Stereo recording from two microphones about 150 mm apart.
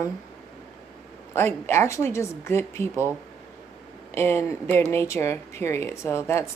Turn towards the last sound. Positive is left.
turn(degrees=15)  # may be behind; listen again after turning